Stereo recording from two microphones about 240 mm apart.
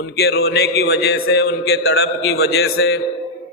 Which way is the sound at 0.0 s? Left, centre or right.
Left.